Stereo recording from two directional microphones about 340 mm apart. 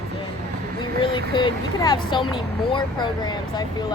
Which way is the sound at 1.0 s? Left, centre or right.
Centre.